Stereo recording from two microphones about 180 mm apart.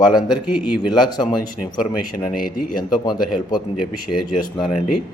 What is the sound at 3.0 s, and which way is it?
Speech, 25° left (ahead or behind).